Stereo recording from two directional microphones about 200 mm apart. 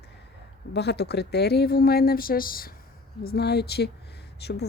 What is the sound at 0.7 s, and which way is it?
Speech, 55° left (ahead or behind).